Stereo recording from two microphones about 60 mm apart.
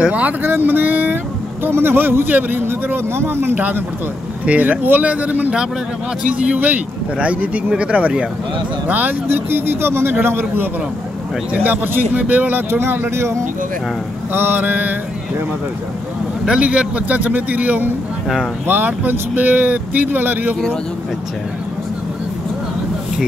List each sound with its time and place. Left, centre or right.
0.0 s a man's voice: right
3.5 s a man's voice: right
12.7 s speech: right
14.3 s speech: right
16.4 s a man's voice: centre